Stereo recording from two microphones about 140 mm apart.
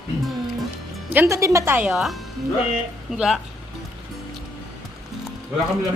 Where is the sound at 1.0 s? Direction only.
15° right (ahead or behind).